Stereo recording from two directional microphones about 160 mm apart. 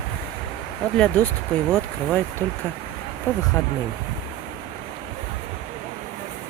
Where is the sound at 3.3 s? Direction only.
15° left (ahead or behind).